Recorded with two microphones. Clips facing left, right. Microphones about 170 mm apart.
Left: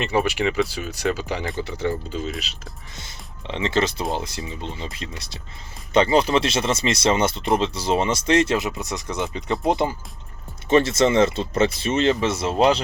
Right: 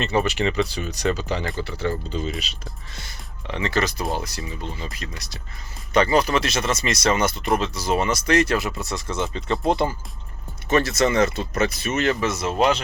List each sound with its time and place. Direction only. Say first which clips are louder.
0.0 s speech: even; 10° left (ahead or behind)
2.1 s speech: right 1 dB; centre (ahead or behind)
2.9 s speech: even; 20° left (ahead or behind)